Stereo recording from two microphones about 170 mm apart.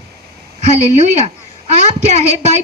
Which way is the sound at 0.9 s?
40° right (ahead or behind).